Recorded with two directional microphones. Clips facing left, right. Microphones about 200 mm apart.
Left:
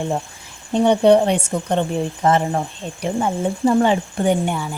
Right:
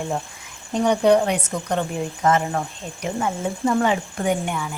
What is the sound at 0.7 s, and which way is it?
A woman's voice, 30° left (ahead or behind).